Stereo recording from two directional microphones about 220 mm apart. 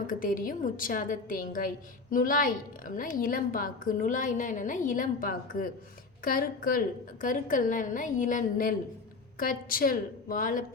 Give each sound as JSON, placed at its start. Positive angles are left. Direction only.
{"t": 0.1, "sound": "a woman's voice", "side_deg": 40}